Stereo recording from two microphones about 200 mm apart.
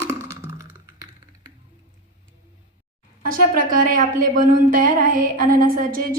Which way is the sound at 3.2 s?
45° right (ahead or behind).